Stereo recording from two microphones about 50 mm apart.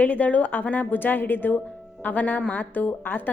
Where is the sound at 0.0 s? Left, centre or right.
Left.